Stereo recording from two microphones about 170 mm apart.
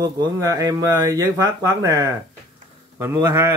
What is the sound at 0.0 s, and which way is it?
Speech, 25° right (ahead or behind).